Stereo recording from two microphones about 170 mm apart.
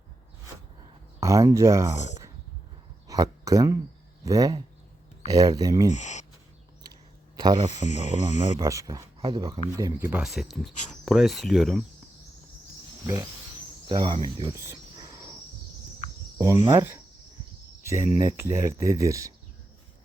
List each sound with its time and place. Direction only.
1.2 s speech: 20° right (ahead or behind)
2.0 s speech: 45° left (ahead or behind)
3.1 s speech: 20° right (ahead or behind)
5.9 s speech: 45° left (ahead or behind)
7.3 s speech: 25° right (ahead or behind)
7.7 s speech: 45° left (ahead or behind)
8.5 s speech: 20° right (ahead or behind)
9.5 s speech: 15° right (ahead or behind); by 11.8 s centre (ahead or behind)
13.8 s speech: 25° right (ahead or behind)
14.9 s a sound: 20° right (ahead or behind)
16.6 s speech: 10° right (ahead or behind)